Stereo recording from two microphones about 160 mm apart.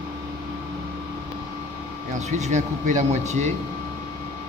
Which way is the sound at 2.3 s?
50° right (ahead or behind).